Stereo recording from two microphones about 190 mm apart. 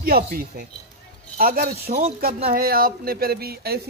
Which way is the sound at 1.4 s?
50° right (ahead or behind).